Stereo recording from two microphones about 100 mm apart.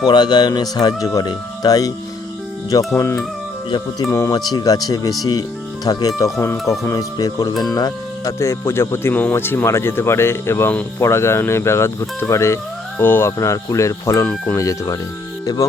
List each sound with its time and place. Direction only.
0.0 s speech: 45° left (ahead or behind); by 3.2 s 30° left (ahead or behind)
3.7 s speech: 40° left (ahead or behind)
6.4 s speech: 25° left (ahead or behind)